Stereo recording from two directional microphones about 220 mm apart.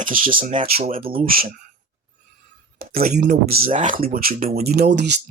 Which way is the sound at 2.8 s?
45° right (ahead or behind).